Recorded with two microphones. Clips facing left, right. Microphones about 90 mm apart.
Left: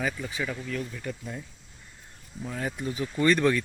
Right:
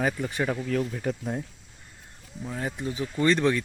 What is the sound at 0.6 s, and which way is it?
Speech, 60° right (ahead or behind).